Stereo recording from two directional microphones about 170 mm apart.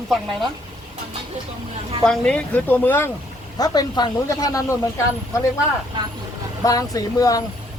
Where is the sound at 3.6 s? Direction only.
25° left (ahead or behind).